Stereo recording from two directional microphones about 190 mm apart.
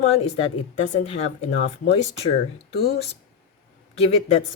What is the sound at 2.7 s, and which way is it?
Speech, 55° left (ahead or behind).